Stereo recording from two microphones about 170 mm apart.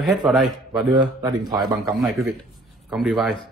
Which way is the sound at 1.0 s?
25° right (ahead or behind).